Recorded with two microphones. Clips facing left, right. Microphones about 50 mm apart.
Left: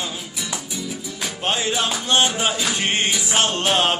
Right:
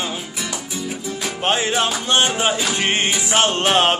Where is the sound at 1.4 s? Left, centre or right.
Right.